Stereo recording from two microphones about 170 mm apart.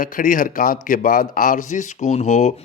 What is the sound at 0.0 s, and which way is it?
Speech, 50° left (ahead or behind).